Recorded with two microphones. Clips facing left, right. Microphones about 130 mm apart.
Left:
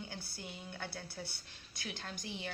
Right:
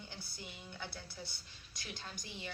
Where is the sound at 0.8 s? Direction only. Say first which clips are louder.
Left 2 dB; 55° left (ahead or behind).